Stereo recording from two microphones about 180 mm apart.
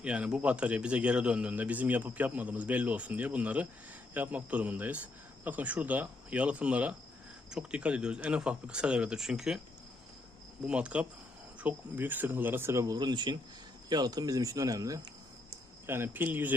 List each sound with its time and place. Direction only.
0.0 s a man's voice: 5° right (ahead or behind)
10.7 s a man's voice: 5° right (ahead or behind)